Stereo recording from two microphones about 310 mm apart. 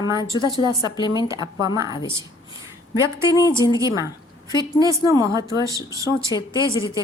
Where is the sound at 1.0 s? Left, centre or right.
Centre.